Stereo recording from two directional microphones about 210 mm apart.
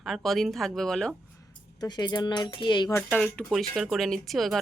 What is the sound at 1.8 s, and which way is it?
Speech, 20° left (ahead or behind).